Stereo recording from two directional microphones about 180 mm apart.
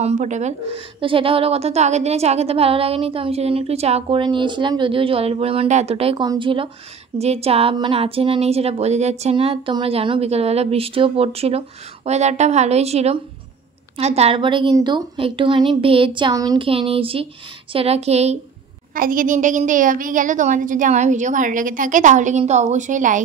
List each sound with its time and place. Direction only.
0.0 s a woman's voice: 40° right (ahead or behind)
18.9 s a woman's voice: 50° right (ahead or behind)